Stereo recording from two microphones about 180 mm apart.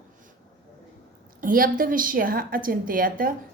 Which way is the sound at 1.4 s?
50° right (ahead or behind).